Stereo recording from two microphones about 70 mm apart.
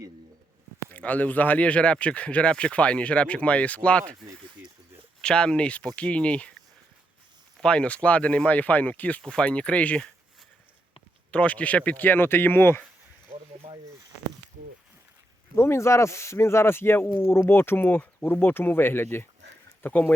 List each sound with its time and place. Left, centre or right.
0.9 s speech: left
7.6 s speech: centre
11.3 s speech: centre
15.5 s speech: left